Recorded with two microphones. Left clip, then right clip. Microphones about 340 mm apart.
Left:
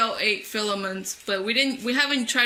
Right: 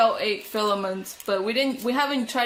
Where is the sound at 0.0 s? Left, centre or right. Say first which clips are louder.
Right 2 dB; right.